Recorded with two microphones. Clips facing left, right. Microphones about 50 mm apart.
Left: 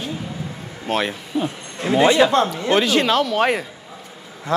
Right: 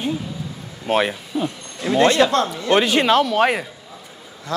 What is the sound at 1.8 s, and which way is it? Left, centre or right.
Speech, centre.